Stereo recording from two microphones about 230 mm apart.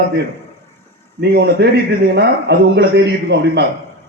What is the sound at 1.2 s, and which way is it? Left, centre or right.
Speech, right.